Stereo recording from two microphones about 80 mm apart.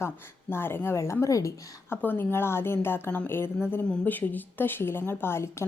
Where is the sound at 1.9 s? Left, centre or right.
Left.